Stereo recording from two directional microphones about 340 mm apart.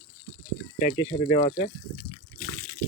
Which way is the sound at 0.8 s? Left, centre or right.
Centre.